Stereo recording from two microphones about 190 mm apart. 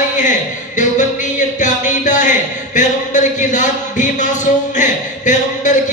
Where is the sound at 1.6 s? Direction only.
40° left (ahead or behind).